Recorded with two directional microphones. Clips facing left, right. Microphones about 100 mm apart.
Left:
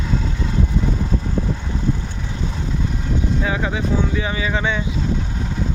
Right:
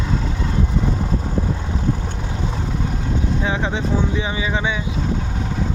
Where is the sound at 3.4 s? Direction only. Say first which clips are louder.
Even; 25° right (ahead or behind).